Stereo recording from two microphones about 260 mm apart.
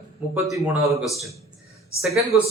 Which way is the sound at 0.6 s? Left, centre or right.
Centre.